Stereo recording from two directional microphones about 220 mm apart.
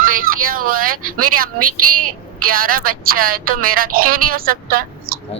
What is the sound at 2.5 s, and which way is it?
Speech, 40° right (ahead or behind).